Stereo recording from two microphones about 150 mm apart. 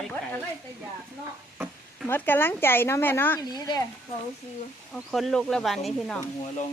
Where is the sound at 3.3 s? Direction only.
25° left (ahead or behind).